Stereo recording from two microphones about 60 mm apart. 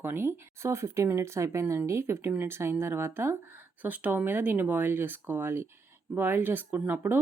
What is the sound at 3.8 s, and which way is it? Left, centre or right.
Speech, right.